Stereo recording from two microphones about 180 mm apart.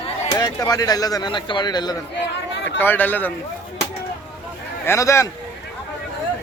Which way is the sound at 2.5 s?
85° left.